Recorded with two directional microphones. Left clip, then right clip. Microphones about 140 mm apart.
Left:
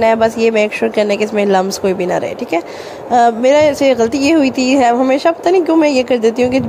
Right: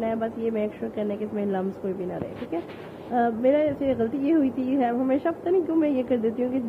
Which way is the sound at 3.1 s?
60° left (ahead or behind).